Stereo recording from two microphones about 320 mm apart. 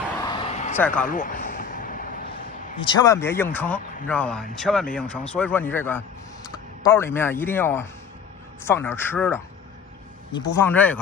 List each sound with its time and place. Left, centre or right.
0.2 s a sound: centre
0.7 s speech: centre
1.0 s vehicle: left
2.7 s a man's voice: centre